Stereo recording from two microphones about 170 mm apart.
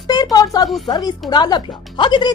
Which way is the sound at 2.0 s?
25° left (ahead or behind).